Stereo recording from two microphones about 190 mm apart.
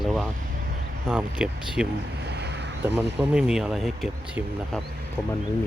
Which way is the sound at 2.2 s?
60° right (ahead or behind).